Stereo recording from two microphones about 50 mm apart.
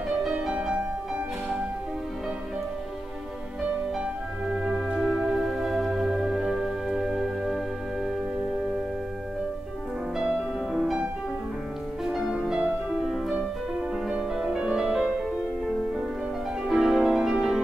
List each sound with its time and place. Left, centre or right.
0.3 s music: centre
4.7 s music: centre
10.1 s music: centre
12.0 s music: centre
16.6 s music: centre